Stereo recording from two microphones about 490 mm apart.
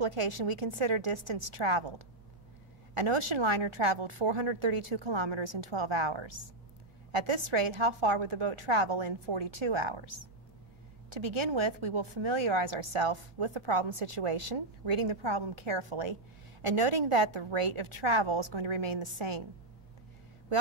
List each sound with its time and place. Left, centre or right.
0.0 s a woman's voice: right
16.6 s a woman's voice: right